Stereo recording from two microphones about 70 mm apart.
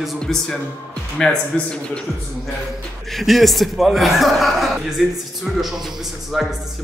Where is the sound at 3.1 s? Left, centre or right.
Centre.